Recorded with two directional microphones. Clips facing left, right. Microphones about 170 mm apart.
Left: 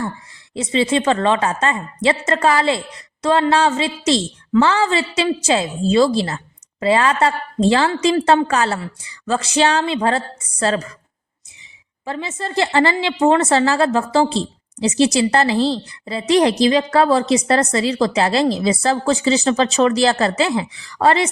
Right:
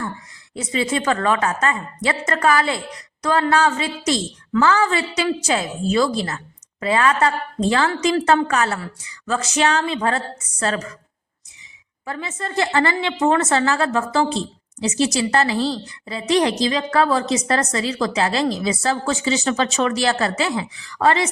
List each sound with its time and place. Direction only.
0.5 s a woman's voice: 25° left (ahead or behind)
12.0 s a woman's voice: 25° left (ahead or behind)